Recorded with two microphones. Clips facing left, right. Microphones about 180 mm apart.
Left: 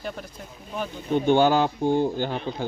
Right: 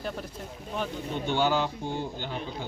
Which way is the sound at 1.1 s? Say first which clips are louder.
Left 8 dB; 55° left (ahead or behind).